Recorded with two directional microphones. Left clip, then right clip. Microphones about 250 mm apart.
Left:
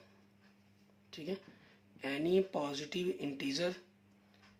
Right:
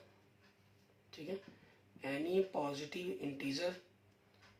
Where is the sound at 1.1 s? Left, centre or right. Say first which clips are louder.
Left 3 dB; left.